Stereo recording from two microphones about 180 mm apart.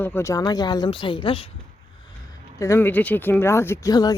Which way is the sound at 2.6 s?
15° left (ahead or behind).